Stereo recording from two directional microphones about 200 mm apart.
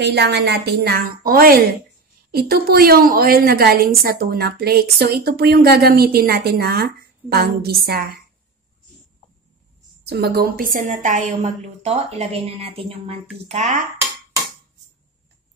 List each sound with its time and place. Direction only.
0.0 s a woman's voice: 55° right (ahead or behind)
10.0 s a woman's voice: 55° right (ahead or behind); by 13.8 s 35° right (ahead or behind)